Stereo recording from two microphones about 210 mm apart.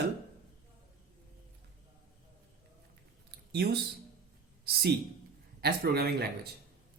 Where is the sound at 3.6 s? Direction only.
50° right (ahead or behind).